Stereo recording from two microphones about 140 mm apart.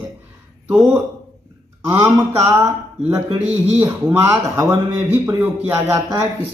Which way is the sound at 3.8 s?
25° right (ahead or behind).